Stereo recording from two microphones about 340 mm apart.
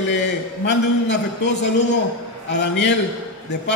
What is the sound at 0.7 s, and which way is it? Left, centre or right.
A man's voice, left.